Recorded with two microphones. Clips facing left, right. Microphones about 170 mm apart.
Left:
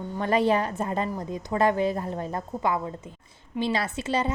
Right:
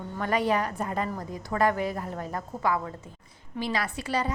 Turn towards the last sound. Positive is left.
turn(degrees=25)  # may be behind; listen again after turning